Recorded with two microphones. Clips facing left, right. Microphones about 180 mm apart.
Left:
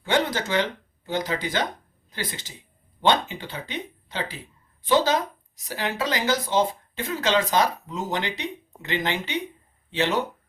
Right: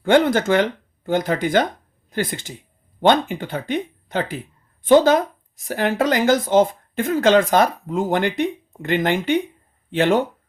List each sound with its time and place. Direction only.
0.0 s speech: 50° right (ahead or behind)